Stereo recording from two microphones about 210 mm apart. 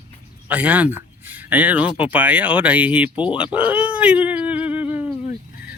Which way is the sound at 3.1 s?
25° left (ahead or behind).